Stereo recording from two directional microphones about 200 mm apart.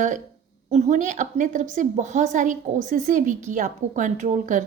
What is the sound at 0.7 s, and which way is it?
A woman's voice, 35° right (ahead or behind).